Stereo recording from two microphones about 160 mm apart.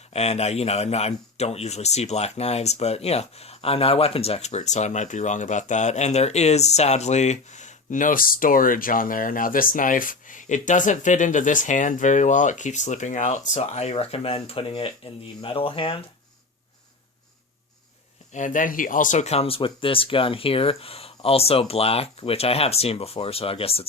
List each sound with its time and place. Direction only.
0.1 s speech: 40° left (ahead or behind)
18.3 s speech: 50° left (ahead or behind); by 23.8 s 35° left (ahead or behind)